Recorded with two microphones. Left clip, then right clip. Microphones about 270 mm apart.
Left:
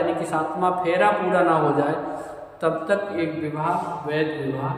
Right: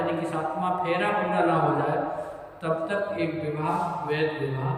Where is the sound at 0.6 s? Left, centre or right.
Centre.